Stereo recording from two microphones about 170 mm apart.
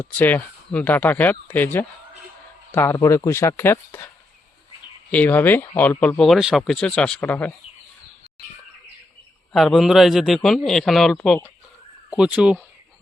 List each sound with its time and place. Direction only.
0.0 s speech: 10° left (ahead or behind)
5.1 s speech: 10° left (ahead or behind)
9.5 s a man's voice: centre (ahead or behind)